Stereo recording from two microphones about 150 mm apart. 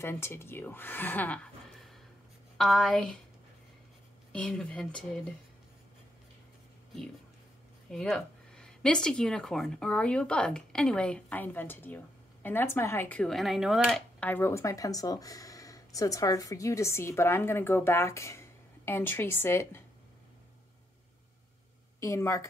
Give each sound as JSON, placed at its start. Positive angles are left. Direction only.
{"t": 0.0, "sound": "speech", "side_deg": 15}
{"t": 4.3, "sound": "speech", "side_deg": 5}
{"t": 7.9, "sound": "speech", "side_deg": 5}
{"t": 14.2, "sound": "speech", "side_deg": 15}
{"t": 22.0, "sound": "speech", "side_deg": 20}